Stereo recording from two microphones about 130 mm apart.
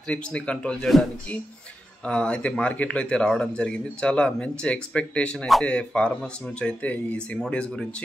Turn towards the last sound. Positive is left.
turn(degrees=5)  # may be behind; listen again after turning